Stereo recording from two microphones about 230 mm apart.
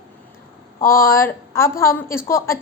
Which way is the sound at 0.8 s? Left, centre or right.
Left.